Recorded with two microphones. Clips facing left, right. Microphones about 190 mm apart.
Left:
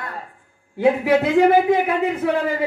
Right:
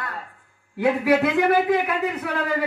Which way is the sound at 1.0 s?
30° left (ahead or behind).